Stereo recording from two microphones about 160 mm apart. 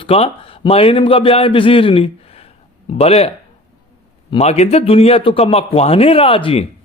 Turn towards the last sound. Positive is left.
turn(degrees=35)  # may be behind; listen again after turning